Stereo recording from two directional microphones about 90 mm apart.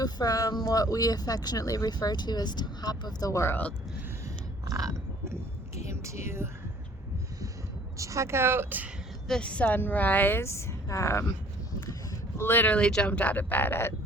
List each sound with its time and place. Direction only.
0.0 s speech: 45° left (ahead or behind)
3.5 s speech: 15° left (ahead or behind)
4.6 s a sound: 40° right (ahead or behind)
7.9 s a woman's voice: 35° right (ahead or behind)
9.2 s a woman's voice: 10° left (ahead or behind); by 11.3 s 30° left (ahead or behind)
12.4 s a woman's voice: 25° left (ahead or behind)